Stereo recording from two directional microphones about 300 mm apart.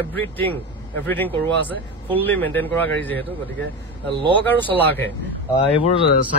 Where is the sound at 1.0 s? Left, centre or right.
Centre.